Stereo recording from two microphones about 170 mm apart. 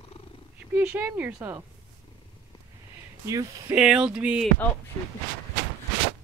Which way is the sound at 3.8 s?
5° right (ahead or behind).